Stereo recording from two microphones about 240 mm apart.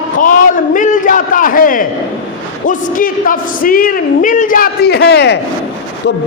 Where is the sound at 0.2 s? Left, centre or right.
Left.